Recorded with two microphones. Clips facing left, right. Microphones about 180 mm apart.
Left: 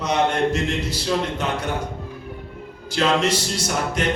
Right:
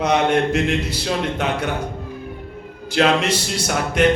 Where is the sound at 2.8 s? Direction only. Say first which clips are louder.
Right 2 dB; 60° right (ahead or behind).